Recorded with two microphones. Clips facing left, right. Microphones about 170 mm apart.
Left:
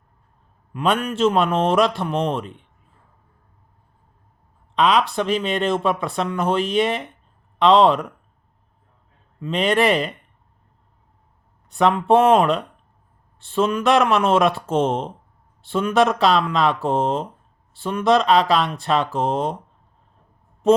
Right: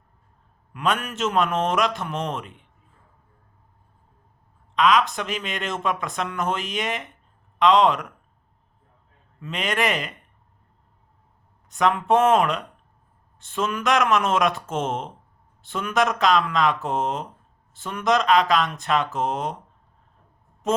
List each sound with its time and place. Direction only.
0.7 s speech: 30° left (ahead or behind)
4.7 s speech: 35° left (ahead or behind)
9.4 s speech: 30° left (ahead or behind)
11.7 s speech: 30° left (ahead or behind)